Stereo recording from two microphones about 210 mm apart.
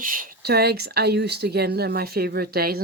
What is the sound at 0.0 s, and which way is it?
Speech, 40° right (ahead or behind).